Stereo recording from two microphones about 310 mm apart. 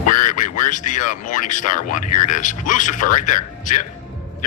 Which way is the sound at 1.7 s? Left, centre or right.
Left.